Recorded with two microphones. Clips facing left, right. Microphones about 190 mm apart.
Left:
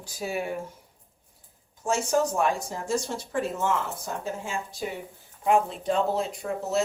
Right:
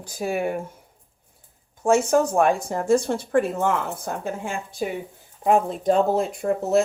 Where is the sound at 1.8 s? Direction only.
55° right (ahead or behind).